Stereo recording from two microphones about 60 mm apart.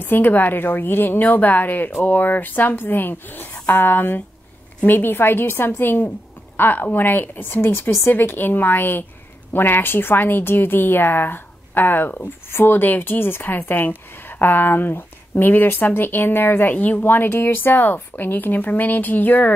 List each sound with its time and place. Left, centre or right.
0.0 s speech: left